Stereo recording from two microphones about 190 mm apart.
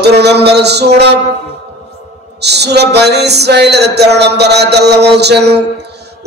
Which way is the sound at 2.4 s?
60° right (ahead or behind).